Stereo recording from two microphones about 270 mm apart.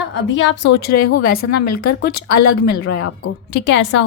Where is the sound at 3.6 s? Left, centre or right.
Left.